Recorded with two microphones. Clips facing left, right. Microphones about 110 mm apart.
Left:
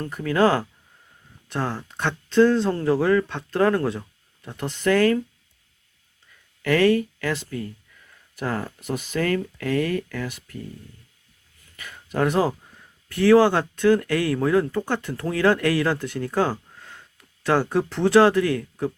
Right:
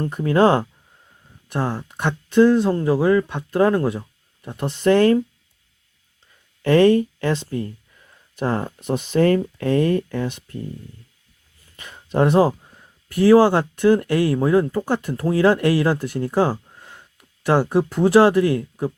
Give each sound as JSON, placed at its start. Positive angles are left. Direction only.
{"t": 0.0, "sound": "speech", "side_deg": -25}
{"t": 6.6, "sound": "speech", "side_deg": -25}
{"t": 11.8, "sound": "speech", "side_deg": -25}